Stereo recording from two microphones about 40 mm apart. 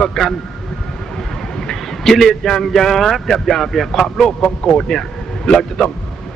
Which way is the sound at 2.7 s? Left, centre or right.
Centre.